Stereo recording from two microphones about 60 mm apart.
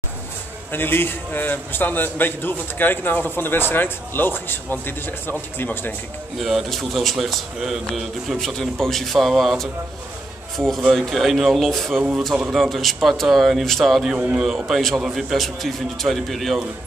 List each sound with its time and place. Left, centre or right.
0.7 s a man's voice: left
6.3 s a man's voice: centre
14.1 s speech: right
14.7 s a man's voice: centre
15.0 s a man's voice: centre